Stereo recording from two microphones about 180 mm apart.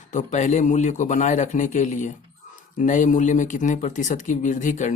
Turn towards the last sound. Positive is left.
turn(degrees=45)  # may be behind; listen again after turning